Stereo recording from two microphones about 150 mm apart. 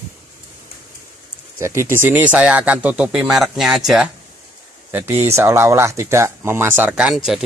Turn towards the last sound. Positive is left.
turn(degrees=0)  # may be behind; listen again after turning